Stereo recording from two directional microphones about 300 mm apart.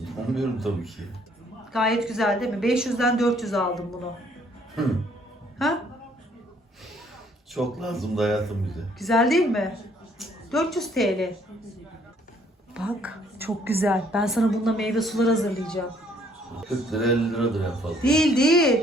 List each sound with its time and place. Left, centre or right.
0.0 s a man's voice: centre
5.5 s a sound: centre
7.5 s a woman's voice: centre
12.7 s a woman's voice: centre